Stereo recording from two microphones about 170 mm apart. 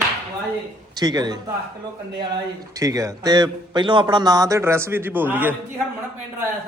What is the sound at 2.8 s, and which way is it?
A man's voice, 20° right (ahead or behind).